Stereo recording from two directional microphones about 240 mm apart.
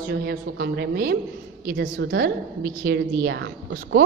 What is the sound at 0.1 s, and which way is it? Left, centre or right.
A woman's voice, right.